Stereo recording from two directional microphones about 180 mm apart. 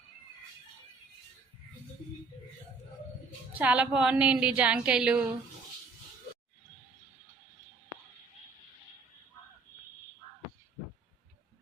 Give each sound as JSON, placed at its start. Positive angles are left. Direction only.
{"t": 3.5, "sound": "a woman's voice", "side_deg": -10}